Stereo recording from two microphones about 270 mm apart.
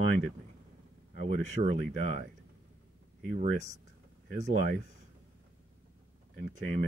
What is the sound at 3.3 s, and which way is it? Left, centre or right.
Speech, right.